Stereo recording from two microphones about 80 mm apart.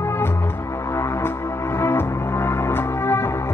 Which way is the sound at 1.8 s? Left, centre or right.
Left.